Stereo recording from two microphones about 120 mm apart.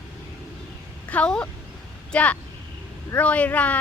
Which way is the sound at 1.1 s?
10° left (ahead or behind).